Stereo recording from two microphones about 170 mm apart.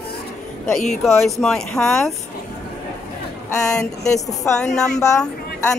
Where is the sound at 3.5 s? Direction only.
5° left (ahead or behind).